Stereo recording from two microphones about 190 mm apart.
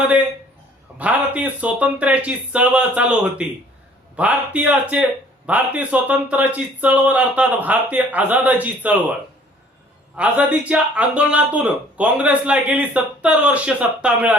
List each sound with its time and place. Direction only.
0.9 s speech: 10° right (ahead or behind)
10.2 s speech: 5° right (ahead or behind)